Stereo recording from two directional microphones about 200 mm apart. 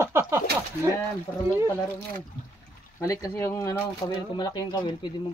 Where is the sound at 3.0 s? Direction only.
15° left (ahead or behind).